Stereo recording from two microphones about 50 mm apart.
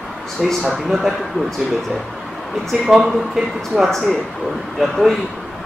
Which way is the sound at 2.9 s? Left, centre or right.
Centre.